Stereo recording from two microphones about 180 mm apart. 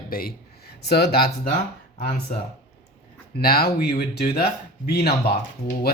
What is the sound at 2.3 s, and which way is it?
Speech, 45° left (ahead or behind).